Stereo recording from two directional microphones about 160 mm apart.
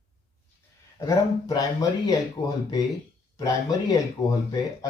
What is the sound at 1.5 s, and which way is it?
Speech, 20° left (ahead or behind).